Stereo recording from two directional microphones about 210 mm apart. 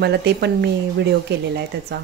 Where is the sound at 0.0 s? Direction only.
50° right (ahead or behind).